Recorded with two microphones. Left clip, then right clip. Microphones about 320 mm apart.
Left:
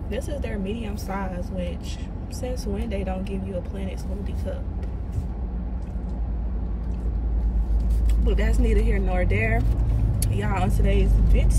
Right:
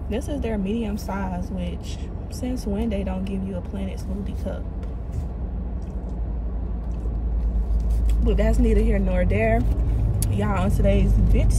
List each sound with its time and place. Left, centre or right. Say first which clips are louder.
0.1 s speech: right 3 dB; centre
2.5 s speech: right 5 dB; centre
8.3 s speech: right 4 dB; centre